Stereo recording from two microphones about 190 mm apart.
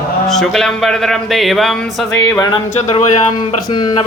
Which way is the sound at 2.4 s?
20° left (ahead or behind).